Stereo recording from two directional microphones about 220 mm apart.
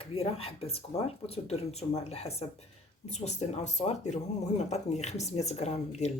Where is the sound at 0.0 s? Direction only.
25° left (ahead or behind).